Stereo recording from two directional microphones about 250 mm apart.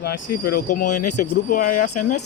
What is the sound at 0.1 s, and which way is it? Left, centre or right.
Speech, left.